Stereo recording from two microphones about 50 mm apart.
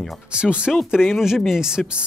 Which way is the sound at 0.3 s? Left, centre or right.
Right.